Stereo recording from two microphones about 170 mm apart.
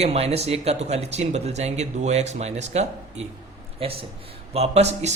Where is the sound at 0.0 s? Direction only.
35° right (ahead or behind).